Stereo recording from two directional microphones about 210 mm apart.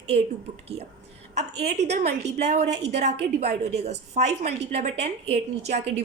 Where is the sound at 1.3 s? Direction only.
35° right (ahead or behind).